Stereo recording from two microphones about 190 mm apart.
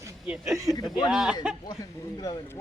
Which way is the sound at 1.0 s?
5° right (ahead or behind).